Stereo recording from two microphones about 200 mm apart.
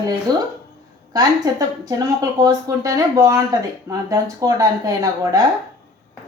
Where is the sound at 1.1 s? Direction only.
20° right (ahead or behind).